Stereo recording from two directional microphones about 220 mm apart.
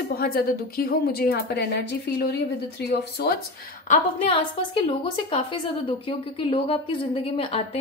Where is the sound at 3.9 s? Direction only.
25° left (ahead or behind).